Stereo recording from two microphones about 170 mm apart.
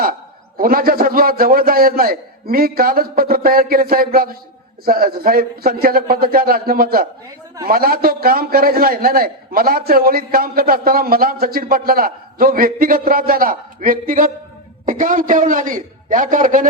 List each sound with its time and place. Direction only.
0.0 s a man's voice: 60° right (ahead or behind)